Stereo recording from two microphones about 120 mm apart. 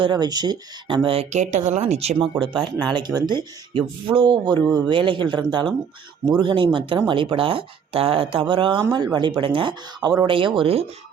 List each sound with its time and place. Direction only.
0.0 s speech: 35° right (ahead or behind); by 2.1 s 60° right (ahead or behind)
2.6 s speech: 10° left (ahead or behind)
2.9 s speech: 35° right (ahead or behind); by 10.8 s 50° right (ahead or behind)